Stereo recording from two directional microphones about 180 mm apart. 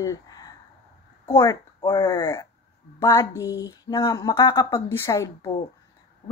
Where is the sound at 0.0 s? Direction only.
20° left (ahead or behind).